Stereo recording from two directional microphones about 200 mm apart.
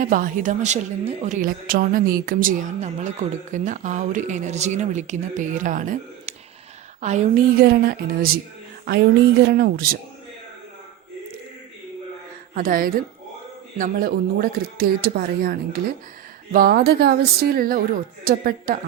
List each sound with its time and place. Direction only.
0.0 s a woman's voice: 40° right (ahead or behind)
7.6 s speech: 50° right (ahead or behind)
12.5 s speech: 45° right (ahead or behind)